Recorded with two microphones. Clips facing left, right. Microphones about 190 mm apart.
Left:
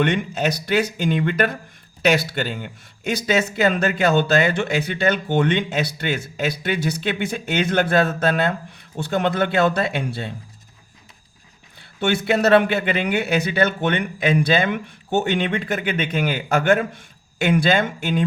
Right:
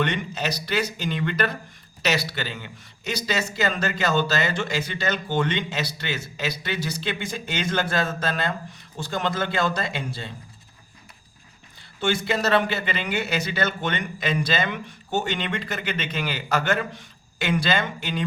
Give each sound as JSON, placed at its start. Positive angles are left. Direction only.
{"t": 0.0, "sound": "speech", "side_deg": 50}
{"t": 11.9, "sound": "speech", "side_deg": 60}